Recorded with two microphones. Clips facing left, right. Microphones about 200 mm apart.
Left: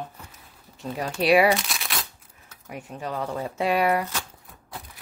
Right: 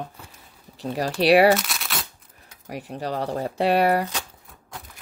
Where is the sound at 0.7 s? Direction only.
35° right (ahead or behind).